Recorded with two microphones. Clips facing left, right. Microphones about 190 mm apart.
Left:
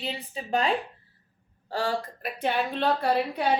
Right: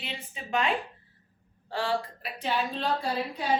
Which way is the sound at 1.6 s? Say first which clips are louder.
Left 1 dB; 40° left (ahead or behind).